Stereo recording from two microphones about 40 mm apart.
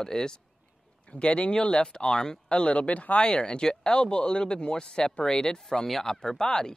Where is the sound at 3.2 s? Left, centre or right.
Left.